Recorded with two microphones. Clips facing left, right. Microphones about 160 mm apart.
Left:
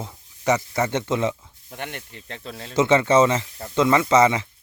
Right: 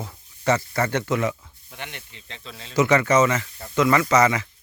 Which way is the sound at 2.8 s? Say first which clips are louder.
Left 1 dB; 25° left (ahead or behind).